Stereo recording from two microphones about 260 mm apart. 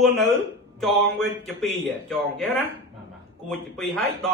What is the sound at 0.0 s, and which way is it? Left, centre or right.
Speech, centre.